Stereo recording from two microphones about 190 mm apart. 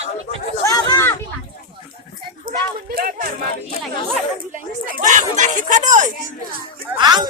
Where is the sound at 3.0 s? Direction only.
50° right (ahead or behind).